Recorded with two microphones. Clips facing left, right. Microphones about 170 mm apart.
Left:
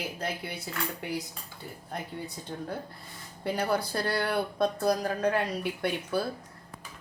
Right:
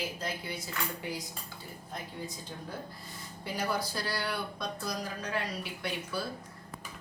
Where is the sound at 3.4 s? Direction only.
60° left (ahead or behind).